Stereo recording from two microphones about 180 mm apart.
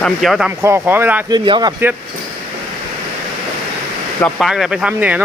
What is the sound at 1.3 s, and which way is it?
Speech, 25° right (ahead or behind).